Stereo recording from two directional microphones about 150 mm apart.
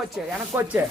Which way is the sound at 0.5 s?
10° right (ahead or behind).